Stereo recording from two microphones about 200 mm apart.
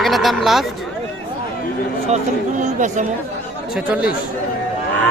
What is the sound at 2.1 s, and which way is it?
Speech, 35° right (ahead or behind).